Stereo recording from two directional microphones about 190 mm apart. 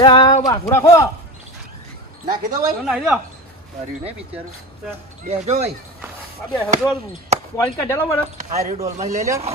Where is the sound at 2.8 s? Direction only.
Centre (ahead or behind).